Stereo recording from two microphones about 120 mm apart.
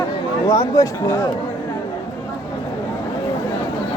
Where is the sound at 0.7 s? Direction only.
25° left (ahead or behind).